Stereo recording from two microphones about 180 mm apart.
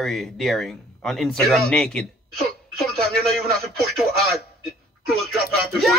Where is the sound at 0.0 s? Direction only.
Centre (ahead or behind).